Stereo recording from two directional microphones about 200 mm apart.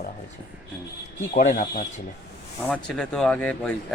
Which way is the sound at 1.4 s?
45° left (ahead or behind).